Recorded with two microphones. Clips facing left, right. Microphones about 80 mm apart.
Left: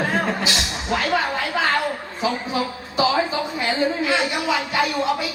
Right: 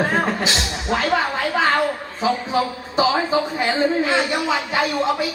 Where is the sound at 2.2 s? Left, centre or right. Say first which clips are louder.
Right 3 dB; right.